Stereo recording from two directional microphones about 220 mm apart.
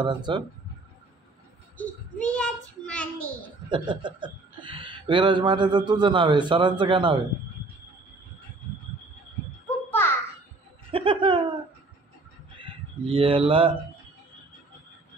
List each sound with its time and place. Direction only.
0.0 s a man's voice: 20° right (ahead or behind)
1.8 s a child's voice: 5° left (ahead or behind)
3.7 s a man's voice: 20° right (ahead or behind)
9.8 s a sound: 10° left (ahead or behind)
10.9 s a man's voice: 25° right (ahead or behind)
12.5 s speech: 25° right (ahead or behind)